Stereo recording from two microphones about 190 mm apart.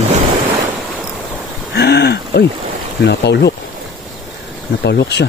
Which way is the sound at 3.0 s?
60° left (ahead or behind).